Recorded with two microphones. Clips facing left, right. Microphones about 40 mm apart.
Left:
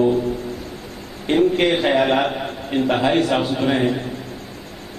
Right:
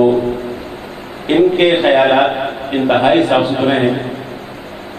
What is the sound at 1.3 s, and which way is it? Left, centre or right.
A man's voice, right.